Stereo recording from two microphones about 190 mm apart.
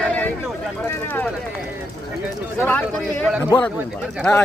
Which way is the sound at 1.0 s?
10° left (ahead or behind).